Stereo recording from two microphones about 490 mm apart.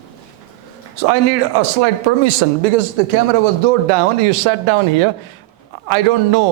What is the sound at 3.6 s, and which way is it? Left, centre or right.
A man's voice, right.